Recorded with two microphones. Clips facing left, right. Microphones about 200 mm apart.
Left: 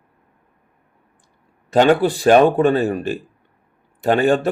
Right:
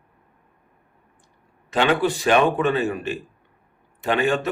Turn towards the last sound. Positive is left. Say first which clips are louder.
# left 6 dB
turn(degrees=35)  # may be behind; listen again after turning